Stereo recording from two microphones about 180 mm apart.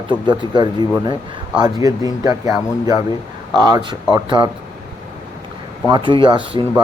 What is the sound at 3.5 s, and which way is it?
Speech, 25° right (ahead or behind).